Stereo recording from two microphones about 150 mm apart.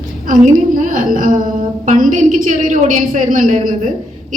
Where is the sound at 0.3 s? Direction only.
60° right (ahead or behind).